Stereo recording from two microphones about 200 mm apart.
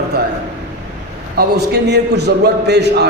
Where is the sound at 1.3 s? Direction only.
55° right (ahead or behind).